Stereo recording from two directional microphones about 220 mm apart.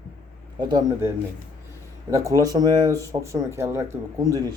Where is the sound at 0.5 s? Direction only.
20° right (ahead or behind).